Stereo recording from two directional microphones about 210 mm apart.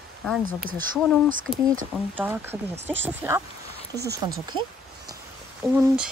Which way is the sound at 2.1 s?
10° right (ahead or behind).